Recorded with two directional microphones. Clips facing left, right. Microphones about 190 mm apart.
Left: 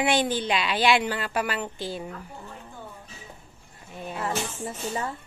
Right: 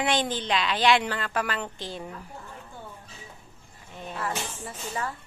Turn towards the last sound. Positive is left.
turn(degrees=25)  # may be behind; listen again after turning